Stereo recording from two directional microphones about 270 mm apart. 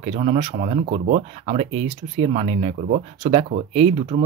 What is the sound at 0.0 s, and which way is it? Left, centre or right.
Speech, right.